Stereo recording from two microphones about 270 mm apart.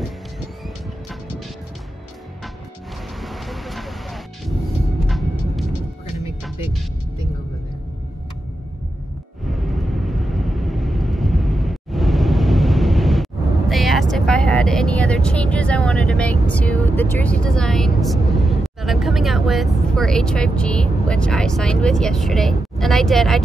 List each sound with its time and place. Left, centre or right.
3.2 s vehicle: centre
9.7 s vehicle: centre